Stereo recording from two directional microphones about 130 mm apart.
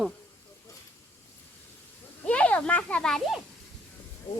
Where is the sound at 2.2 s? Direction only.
10° left (ahead or behind).